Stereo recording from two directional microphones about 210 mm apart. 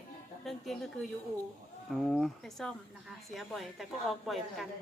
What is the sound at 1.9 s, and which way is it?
Speech, centre (ahead or behind).